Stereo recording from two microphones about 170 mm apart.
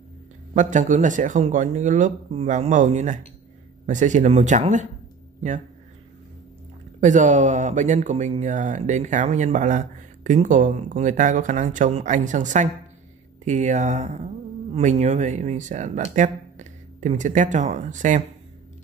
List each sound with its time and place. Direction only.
0.6 s speech: 45° right (ahead or behind)
7.0 s speech: 45° right (ahead or behind)